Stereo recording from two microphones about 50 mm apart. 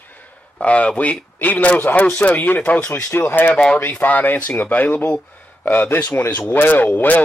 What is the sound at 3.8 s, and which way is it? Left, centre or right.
Speech, left.